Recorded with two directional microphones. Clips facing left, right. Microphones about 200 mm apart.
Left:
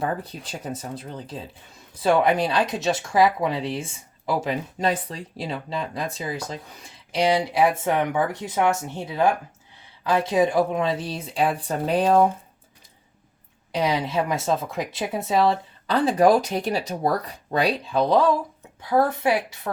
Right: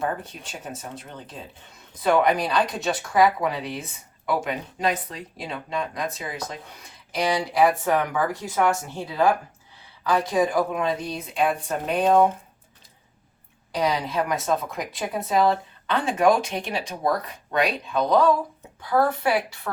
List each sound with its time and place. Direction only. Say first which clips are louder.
0.2 s speech: left 3 dB; 35° left (ahead or behind)
13.7 s speech: left 1 dB; 25° left (ahead or behind)